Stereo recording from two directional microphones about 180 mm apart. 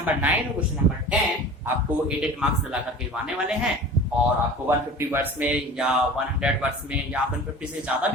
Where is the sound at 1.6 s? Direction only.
5° right (ahead or behind).